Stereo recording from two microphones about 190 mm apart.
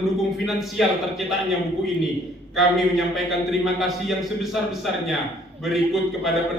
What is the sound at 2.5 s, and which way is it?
A man's voice, centre (ahead or behind).